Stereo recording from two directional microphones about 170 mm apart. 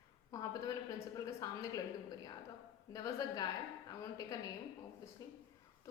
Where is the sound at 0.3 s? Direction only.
20° left (ahead or behind).